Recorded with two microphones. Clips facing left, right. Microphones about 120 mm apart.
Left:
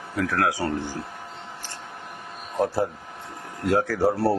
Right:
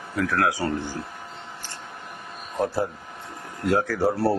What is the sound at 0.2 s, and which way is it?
Speech, 40° left (ahead or behind).